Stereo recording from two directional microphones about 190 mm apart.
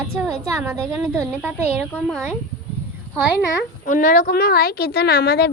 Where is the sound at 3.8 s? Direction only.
45° left (ahead or behind).